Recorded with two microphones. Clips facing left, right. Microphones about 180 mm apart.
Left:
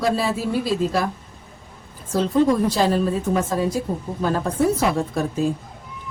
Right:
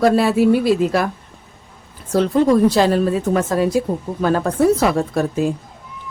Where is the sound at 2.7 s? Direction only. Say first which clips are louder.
Right 4 dB; 75° right (ahead or behind).